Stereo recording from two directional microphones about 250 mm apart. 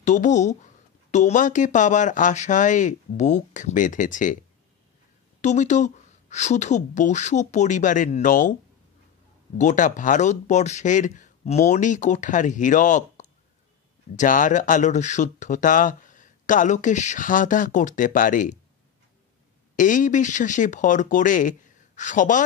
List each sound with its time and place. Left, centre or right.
0.0 s speech: left
5.4 s speech: left
9.6 s speech: left
19.7 s speech: left